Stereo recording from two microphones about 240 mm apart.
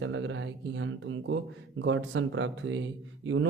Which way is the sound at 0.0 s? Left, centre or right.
Right.